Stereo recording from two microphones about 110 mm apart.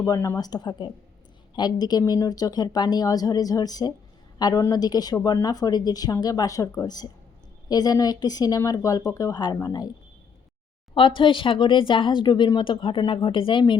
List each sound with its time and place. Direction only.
0.0 s a woman's voice: 30° left (ahead or behind)
10.9 s speech: 50° left (ahead or behind)